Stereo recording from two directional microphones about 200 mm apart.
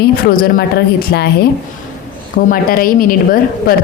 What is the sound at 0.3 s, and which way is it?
Speech, 45° left (ahead or behind).